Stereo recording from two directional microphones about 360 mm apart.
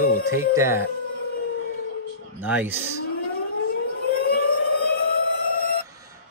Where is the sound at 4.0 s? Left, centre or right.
Left.